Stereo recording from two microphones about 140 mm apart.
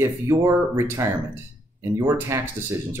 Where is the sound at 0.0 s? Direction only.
15° right (ahead or behind).